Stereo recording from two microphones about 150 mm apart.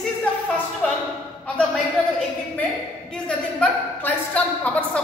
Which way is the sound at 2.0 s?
5° left (ahead or behind).